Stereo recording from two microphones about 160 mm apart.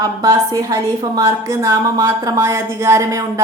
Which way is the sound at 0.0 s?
20° right (ahead or behind).